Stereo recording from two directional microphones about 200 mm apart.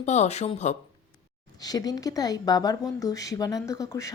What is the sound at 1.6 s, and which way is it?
A woman's voice, 20° left (ahead or behind).